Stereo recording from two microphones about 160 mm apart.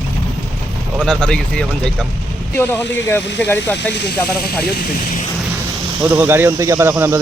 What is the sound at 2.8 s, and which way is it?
Speech, 90° left.